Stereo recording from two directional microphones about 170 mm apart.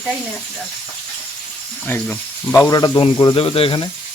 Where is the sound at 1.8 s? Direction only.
10° left (ahead or behind).